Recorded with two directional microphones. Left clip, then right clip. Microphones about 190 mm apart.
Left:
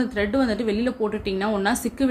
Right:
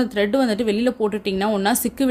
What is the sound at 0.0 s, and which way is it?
Speech, 45° right (ahead or behind).